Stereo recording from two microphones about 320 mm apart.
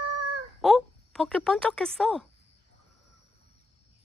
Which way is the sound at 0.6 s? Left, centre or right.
Centre.